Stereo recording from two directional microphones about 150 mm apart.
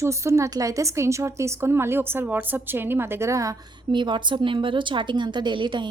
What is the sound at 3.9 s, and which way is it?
A woman's voice, 30° right (ahead or behind).